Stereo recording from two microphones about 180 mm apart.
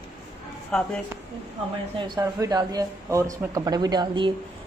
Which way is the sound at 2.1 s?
20° right (ahead or behind).